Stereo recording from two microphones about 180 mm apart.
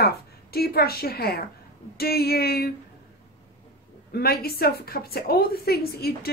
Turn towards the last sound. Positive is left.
turn(degrees=60)  # may be behind; listen again after turning